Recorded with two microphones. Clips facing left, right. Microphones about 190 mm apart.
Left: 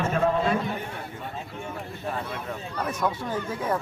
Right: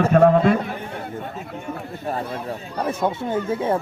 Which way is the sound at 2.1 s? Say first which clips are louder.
Right 5 dB; 35° right (ahead or behind).